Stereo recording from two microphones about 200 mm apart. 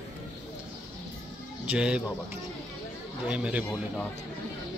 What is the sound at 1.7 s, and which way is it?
Speech, 5° right (ahead or behind).